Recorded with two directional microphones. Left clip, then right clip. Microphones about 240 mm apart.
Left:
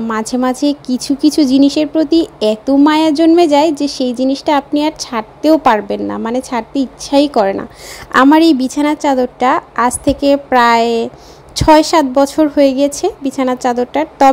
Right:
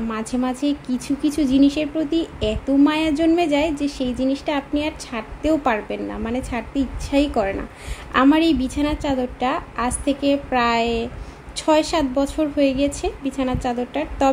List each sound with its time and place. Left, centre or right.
0.1 s speech: left